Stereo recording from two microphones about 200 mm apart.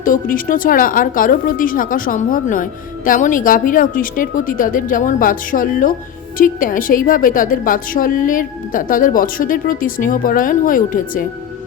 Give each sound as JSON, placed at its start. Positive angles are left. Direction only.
{"t": 0.0, "sound": "a woman's voice", "side_deg": 45}